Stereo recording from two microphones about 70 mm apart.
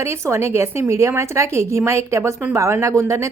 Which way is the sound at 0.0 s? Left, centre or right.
Right.